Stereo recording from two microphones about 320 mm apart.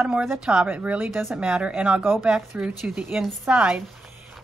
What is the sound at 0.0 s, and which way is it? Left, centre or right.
A woman's voice, centre.